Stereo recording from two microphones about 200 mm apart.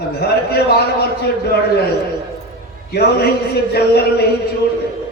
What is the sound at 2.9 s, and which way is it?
A man's voice, 50° left (ahead or behind).